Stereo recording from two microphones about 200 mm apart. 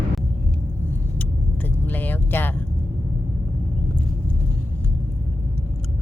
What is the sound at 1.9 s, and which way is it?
Vehicle, 10° left (ahead or behind).